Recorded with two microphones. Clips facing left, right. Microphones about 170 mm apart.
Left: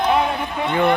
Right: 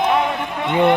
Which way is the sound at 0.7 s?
20° right (ahead or behind).